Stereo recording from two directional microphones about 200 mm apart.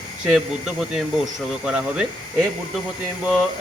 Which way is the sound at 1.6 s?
5° right (ahead or behind).